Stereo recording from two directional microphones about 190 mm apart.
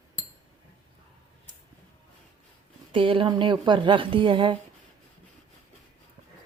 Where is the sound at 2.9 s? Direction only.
30° right (ahead or behind).